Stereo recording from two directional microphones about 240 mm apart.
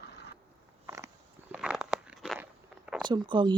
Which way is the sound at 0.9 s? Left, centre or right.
Centre.